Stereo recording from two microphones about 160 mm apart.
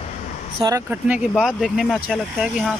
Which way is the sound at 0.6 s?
20° right (ahead or behind).